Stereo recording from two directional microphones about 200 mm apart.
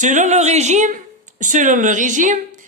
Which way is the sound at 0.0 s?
40° right (ahead or behind).